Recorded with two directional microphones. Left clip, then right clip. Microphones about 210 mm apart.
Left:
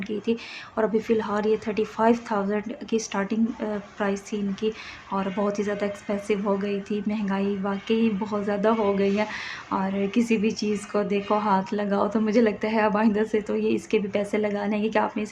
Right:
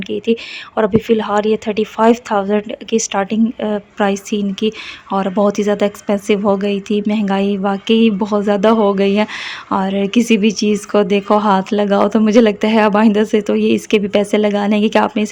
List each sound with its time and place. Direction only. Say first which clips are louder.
0.8 s a woman's voice: right 9 dB; 45° right (ahead or behind)